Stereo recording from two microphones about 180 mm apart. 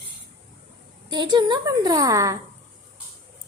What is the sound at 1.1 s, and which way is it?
A woman's voice, 25° right (ahead or behind).